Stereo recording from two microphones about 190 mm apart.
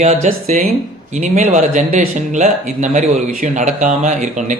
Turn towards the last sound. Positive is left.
turn(degrees=-40)  # may be behind; listen again after turning